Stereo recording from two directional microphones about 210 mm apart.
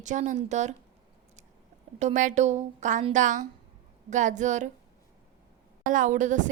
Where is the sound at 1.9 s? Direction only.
35° right (ahead or behind).